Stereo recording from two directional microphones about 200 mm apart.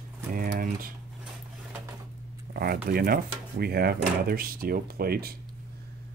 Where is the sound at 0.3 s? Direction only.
45° right (ahead or behind).